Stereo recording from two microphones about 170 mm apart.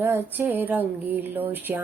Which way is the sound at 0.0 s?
10° right (ahead or behind).